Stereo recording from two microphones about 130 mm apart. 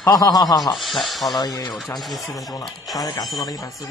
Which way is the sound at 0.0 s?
30° left (ahead or behind).